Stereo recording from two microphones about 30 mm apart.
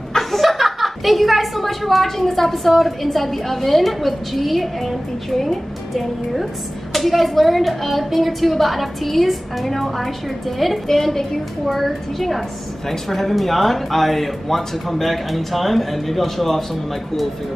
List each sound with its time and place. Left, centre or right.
0.2 s a woman's voice: centre